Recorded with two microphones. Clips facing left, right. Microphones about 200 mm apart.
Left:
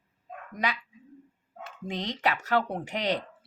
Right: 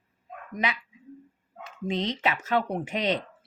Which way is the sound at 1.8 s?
20° right (ahead or behind).